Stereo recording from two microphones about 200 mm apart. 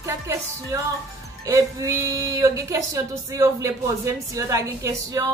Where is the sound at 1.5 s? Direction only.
15° right (ahead or behind).